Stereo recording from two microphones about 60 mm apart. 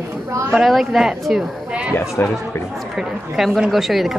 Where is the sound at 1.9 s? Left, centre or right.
Left.